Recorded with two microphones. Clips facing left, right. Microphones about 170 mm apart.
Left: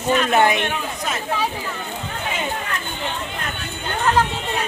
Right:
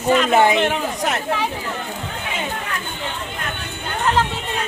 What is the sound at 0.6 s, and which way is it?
Speech, 70° right (ahead or behind).